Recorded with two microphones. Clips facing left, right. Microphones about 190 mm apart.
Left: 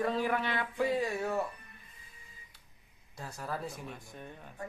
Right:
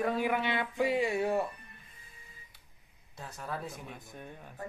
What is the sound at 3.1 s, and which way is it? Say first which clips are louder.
Speech: left 1 dB; centre (ahead or behind).